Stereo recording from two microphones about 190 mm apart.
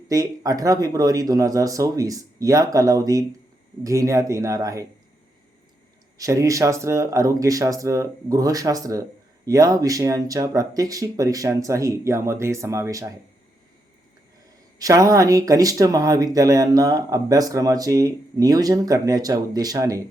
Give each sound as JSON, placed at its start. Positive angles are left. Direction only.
{"t": 0.1, "sound": "speech", "side_deg": -20}
{"t": 6.1, "sound": "speech", "side_deg": -15}
{"t": 14.8, "sound": "speech", "side_deg": -15}